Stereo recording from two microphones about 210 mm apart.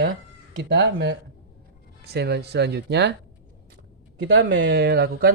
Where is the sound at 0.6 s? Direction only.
60° right (ahead or behind).